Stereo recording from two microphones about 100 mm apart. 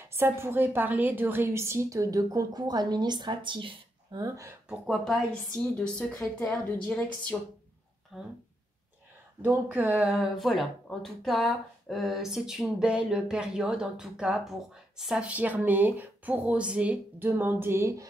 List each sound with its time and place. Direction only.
0.1 s a woman's voice: 25° right (ahead or behind); by 4.2 s 55° right (ahead or behind)
4.2 s a woman's voice: 30° right (ahead or behind)
4.6 s a woman's voice: centre (ahead or behind)
8.1 s speech: 5° right (ahead or behind)
9.4 s speech: 15° right (ahead or behind)
9.9 s speech: 5° right (ahead or behind); by 18.0 s 25° right (ahead or behind)